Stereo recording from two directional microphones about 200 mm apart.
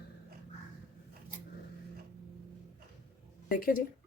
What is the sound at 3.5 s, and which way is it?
Speech, 45° left (ahead or behind).